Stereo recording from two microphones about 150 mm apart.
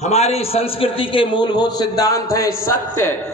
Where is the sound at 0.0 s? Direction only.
45° left (ahead or behind).